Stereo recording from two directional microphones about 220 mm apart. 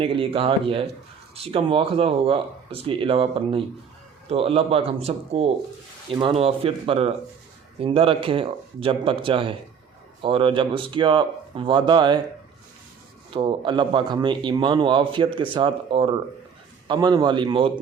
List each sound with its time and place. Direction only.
0.0 s speech: 25° right (ahead or behind)
13.3 s speech: 20° right (ahead or behind)